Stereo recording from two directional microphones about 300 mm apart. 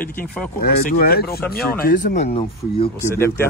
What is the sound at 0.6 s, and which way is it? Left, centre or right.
Speech, left.